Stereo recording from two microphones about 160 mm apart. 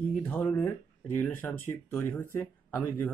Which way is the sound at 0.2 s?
10° left (ahead or behind).